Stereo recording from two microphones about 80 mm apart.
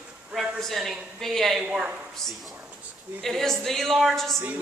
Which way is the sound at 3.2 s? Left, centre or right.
Centre.